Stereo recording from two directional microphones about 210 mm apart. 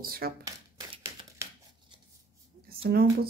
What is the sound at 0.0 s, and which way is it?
Speech, 45° right (ahead or behind).